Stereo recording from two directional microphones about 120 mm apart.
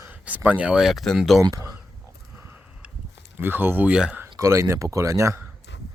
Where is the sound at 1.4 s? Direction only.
30° right (ahead or behind).